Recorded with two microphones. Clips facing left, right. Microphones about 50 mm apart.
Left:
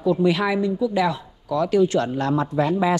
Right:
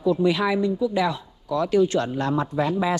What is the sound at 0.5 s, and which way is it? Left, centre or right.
Speech, left.